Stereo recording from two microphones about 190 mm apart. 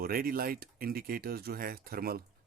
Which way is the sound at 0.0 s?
50° right (ahead or behind).